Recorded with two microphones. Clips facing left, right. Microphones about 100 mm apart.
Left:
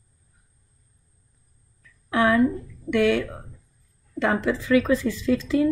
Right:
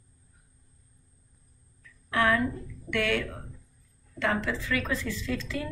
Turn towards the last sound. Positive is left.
turn(degrees=15)  # may be behind; listen again after turning